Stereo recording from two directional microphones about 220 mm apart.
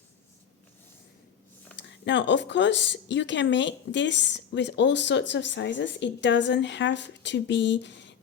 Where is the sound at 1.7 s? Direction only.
55° left (ahead or behind).